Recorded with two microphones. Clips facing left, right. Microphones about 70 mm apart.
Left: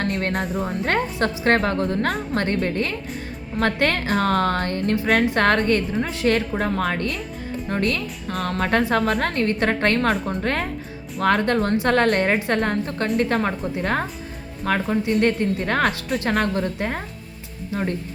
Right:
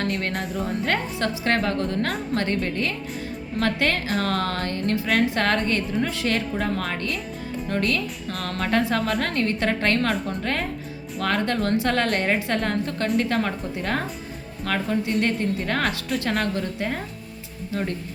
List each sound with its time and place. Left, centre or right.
0.5 s a woman's voice: left
9.2 s a woman's voice: left